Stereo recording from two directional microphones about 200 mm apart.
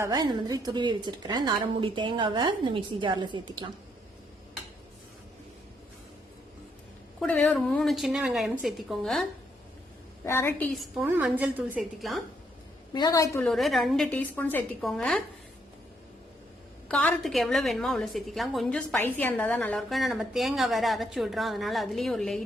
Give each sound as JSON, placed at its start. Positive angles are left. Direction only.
{"t": 0.0, "sound": "a woman's voice", "side_deg": -20}
{"t": 7.2, "sound": "a woman's voice", "side_deg": 5}
{"t": 10.2, "sound": "a woman's voice", "side_deg": 10}
{"t": 10.7, "sound": "a woman's voice", "side_deg": 0}
{"t": 12.9, "sound": "a woman's voice", "side_deg": 20}
{"t": 13.4, "sound": "a woman's voice", "side_deg": 0}
{"t": 16.9, "sound": "a woman's voice", "side_deg": 5}